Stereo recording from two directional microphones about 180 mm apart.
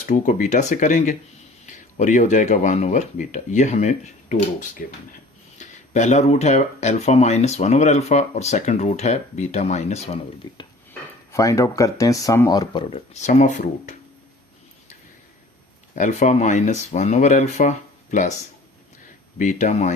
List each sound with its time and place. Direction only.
0.0 s speech: 45° left (ahead or behind)
5.5 s speech: 40° left (ahead or behind)
10.5 s speech: 25° left (ahead or behind)
13.1 s speech: 45° left (ahead or behind)
16.0 s speech: 40° left (ahead or behind)
19.4 s speech: 45° left (ahead or behind)